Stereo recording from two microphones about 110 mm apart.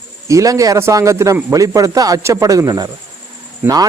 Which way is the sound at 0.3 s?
30° right (ahead or behind).